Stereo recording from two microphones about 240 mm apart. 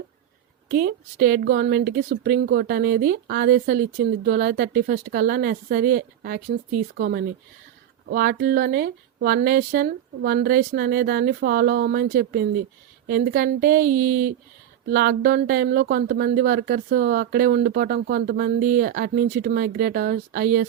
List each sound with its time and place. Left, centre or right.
0.7 s speech: right